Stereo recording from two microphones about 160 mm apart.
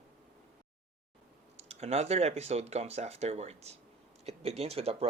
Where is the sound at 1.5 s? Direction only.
40° right (ahead or behind).